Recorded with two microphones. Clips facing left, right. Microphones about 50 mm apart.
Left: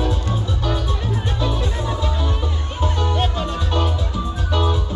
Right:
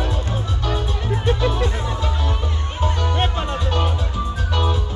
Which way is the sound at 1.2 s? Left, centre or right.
Right.